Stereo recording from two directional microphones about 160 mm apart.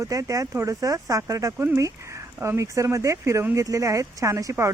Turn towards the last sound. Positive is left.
turn(degrees=-20)  # may be behind; listen again after turning